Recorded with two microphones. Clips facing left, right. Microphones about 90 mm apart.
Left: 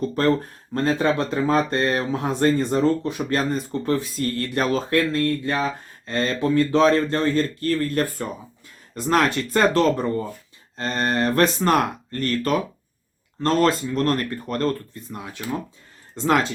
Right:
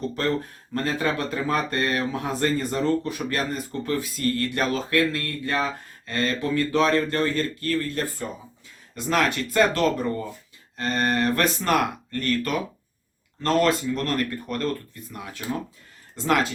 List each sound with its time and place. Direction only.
0.2 s speech: 40° left (ahead or behind)
0.8 s speech: 25° left (ahead or behind)
9.0 s speech: 35° left (ahead or behind)
15.1 s speech: 25° left (ahead or behind)